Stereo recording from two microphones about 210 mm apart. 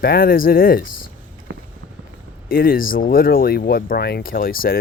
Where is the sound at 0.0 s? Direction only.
45° left (ahead or behind).